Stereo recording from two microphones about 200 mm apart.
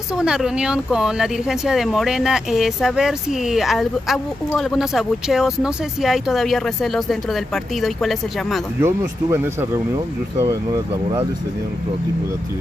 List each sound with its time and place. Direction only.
0.1 s speech: 5° right (ahead or behind)
8.8 s speech: 15° right (ahead or behind)